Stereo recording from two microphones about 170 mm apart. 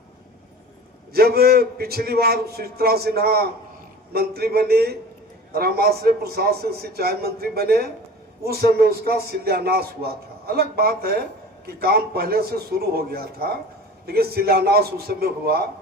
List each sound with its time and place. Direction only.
1.1 s a man's voice: 65° right (ahead or behind)